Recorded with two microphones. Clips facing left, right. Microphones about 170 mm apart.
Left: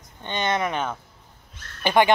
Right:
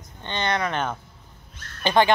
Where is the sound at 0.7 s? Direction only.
5° left (ahead or behind).